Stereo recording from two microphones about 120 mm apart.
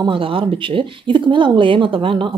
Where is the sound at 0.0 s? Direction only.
45° right (ahead or behind).